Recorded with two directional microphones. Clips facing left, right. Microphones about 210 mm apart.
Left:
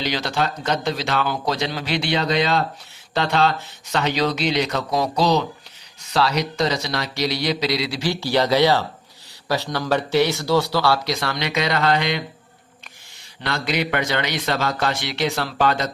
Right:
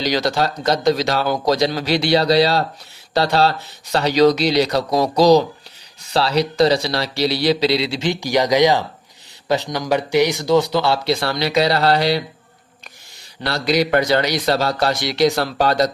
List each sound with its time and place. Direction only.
0.0 s a man's voice: 40° right (ahead or behind)
13.4 s a man's voice: 35° right (ahead or behind)